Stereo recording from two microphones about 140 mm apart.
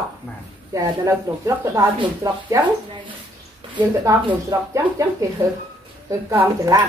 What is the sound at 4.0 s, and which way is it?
Speech, 25° right (ahead or behind).